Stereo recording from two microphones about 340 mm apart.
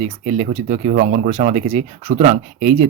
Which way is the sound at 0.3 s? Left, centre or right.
Right.